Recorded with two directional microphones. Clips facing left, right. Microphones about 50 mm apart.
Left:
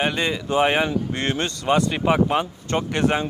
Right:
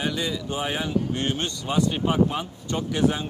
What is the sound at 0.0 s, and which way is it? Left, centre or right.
Speech, left.